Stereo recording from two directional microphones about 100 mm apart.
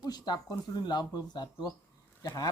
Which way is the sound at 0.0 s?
45° left (ahead or behind).